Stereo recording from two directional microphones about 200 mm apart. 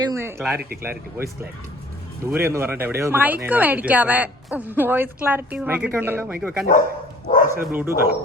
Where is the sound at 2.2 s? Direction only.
10° right (ahead or behind).